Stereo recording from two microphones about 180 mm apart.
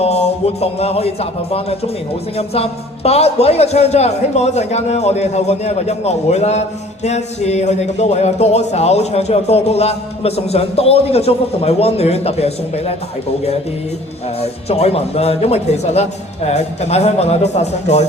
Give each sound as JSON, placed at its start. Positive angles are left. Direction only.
{"t": 0.0, "sound": "a man's voice", "side_deg": 35}
{"t": 14.4, "sound": "a man's voice", "side_deg": 35}